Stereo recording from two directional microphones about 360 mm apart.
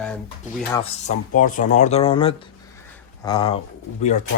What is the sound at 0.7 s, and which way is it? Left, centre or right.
Speech, centre.